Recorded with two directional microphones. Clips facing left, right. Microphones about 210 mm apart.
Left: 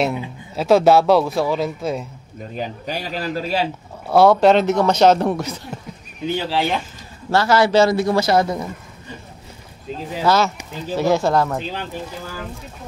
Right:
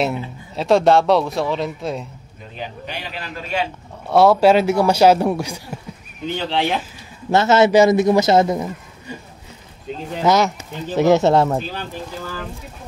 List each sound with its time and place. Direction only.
0.0 s a man's voice: centre (ahead or behind)
2.5 s a man's voice: 40° left (ahead or behind)
4.1 s a man's voice: centre (ahead or behind)
6.2 s a man's voice: 5° left (ahead or behind)
7.2 s a man's voice: 20° right (ahead or behind)
9.9 s a sound: centre (ahead or behind)
10.2 s a man's voice: 20° right (ahead or behind)